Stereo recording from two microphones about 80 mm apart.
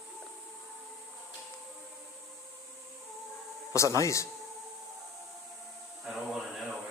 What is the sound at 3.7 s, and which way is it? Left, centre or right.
Speech, left.